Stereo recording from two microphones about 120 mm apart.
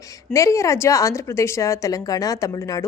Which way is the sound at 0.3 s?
25° left (ahead or behind).